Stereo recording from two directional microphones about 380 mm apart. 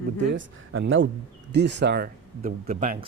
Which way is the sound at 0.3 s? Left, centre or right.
Right.